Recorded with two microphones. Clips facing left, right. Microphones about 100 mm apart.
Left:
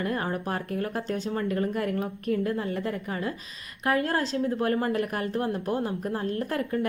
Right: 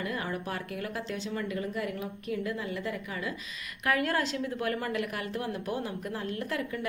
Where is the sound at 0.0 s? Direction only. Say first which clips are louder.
Left 5 dB; 45° left (ahead or behind).